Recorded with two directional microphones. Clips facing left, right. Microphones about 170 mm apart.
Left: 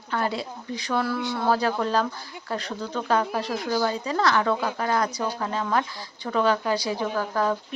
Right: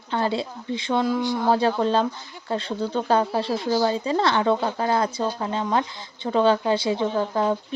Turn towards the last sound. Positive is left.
turn(degrees=-25)  # may be behind; listen again after turning